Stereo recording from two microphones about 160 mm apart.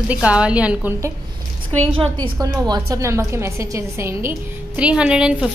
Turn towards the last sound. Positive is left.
turn(degrees=-5)  # may be behind; listen again after turning